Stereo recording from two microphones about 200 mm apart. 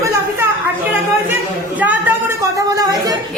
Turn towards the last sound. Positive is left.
turn(degrees=-15)  # may be behind; listen again after turning